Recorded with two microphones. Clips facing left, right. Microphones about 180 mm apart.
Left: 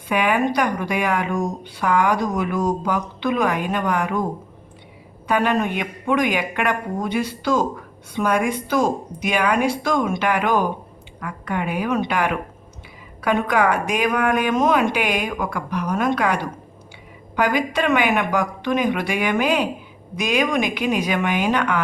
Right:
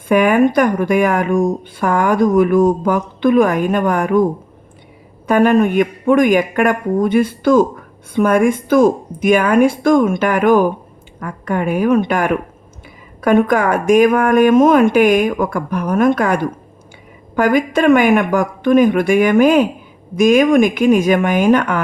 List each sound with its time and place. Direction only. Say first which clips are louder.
0.1 s speech: right 8 dB; 45° right (ahead or behind)
5.3 s speech: right 8 dB; 50° right (ahead or behind)